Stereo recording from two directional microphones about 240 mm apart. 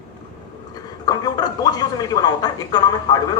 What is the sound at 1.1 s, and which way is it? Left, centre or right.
A woman's voice, centre.